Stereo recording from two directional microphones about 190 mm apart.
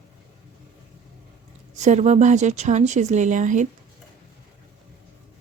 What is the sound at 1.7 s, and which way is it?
A woman's voice, 35° right (ahead or behind).